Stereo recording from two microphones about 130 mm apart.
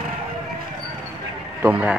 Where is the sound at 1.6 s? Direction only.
15° right (ahead or behind).